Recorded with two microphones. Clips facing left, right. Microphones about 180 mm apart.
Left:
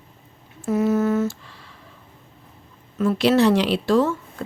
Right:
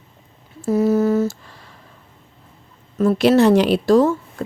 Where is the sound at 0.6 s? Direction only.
35° right (ahead or behind).